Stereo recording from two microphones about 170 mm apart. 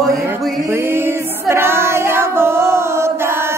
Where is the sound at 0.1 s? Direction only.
15° right (ahead or behind).